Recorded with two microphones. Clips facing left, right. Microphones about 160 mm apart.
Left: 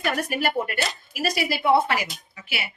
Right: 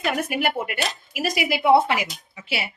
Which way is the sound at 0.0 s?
20° right (ahead or behind).